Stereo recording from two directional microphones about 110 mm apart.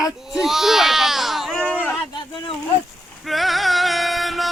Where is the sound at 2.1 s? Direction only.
45° left (ahead or behind).